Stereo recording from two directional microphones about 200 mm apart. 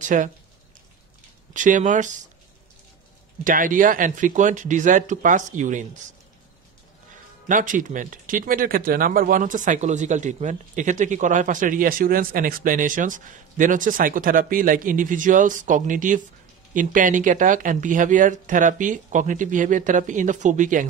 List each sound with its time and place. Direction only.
0.0 s speech: 40° right (ahead or behind)
1.5 s speech: 40° right (ahead or behind)
3.4 s speech: 40° right (ahead or behind)
7.4 s speech: 40° right (ahead or behind)